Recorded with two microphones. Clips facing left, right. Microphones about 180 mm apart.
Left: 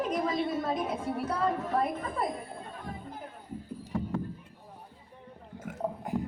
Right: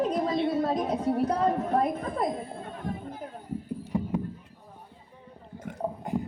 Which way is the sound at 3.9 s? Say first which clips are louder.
Right 3 dB; 15° right (ahead or behind).